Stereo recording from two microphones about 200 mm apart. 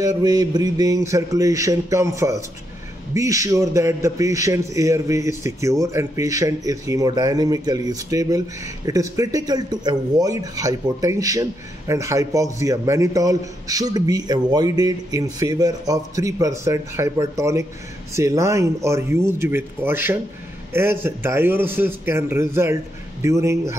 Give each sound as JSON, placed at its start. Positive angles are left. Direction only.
{"t": 0.0, "sound": "a man's voice", "side_deg": -20}